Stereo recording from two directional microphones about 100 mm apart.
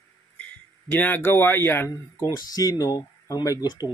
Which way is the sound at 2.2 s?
40° left (ahead or behind).